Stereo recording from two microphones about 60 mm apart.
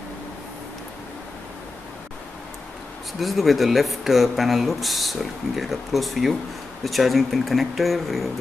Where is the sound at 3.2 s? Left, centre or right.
Centre.